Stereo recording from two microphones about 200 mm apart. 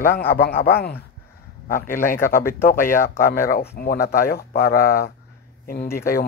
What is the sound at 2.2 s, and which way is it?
Speech, 45° left (ahead or behind).